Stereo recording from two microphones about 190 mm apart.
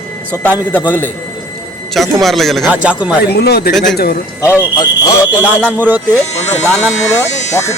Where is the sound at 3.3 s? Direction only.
55° left (ahead or behind).